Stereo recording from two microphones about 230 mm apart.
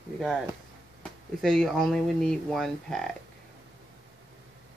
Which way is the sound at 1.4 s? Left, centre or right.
Centre.